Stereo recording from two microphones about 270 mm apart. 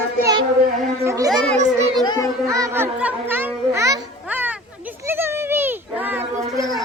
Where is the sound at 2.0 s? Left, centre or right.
Centre.